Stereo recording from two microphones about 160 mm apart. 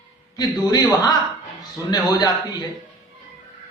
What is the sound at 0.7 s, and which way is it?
A man's voice, 25° left (ahead or behind).